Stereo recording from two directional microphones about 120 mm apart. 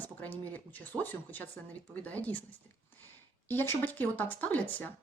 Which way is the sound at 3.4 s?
20° left (ahead or behind).